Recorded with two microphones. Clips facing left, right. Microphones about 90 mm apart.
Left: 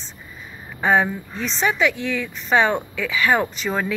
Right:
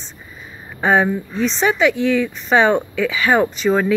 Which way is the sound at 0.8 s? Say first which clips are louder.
Right 3 dB; 20° right (ahead or behind).